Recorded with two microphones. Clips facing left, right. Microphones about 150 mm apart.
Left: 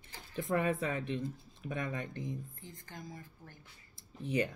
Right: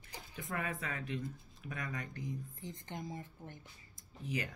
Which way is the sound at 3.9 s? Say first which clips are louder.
Left 7 dB; 30° left (ahead or behind).